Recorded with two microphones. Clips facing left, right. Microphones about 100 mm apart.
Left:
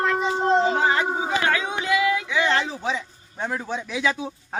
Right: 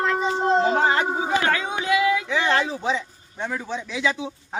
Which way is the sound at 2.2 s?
30° right (ahead or behind).